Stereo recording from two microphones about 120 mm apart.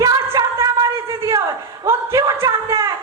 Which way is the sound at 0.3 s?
30° right (ahead or behind).